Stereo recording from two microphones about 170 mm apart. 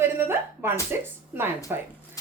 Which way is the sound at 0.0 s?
15° right (ahead or behind).